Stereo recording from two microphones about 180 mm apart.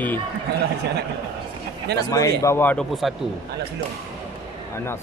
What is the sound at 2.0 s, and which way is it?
A man's voice, 20° left (ahead or behind).